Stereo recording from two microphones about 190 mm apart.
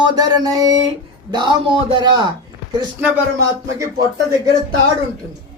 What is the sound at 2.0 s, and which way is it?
Speech, 25° right (ahead or behind).